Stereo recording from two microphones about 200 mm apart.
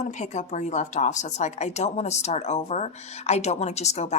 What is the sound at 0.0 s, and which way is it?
Speech, 35° left (ahead or behind).